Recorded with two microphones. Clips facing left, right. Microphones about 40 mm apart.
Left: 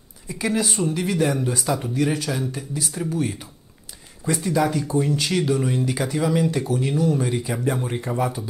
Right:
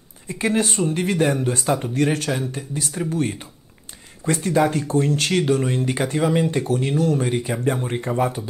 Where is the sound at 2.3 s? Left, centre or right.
Right.